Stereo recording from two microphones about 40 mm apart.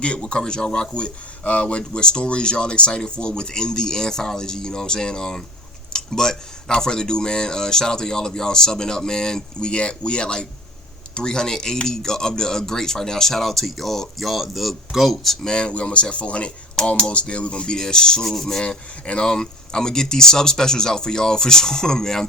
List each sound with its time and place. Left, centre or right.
0.0 s speech: left; by 15.4 s centre
15.4 s speech: left
18.6 s speech: left